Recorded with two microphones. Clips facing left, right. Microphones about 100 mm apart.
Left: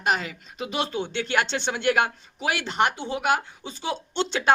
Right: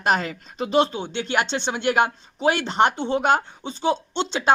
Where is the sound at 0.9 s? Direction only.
20° right (ahead or behind).